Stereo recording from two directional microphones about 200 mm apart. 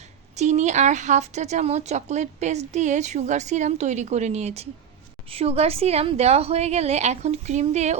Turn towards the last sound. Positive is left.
turn(degrees=-35)  # may be behind; listen again after turning